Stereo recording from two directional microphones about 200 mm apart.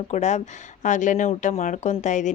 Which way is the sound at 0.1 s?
35° left (ahead or behind).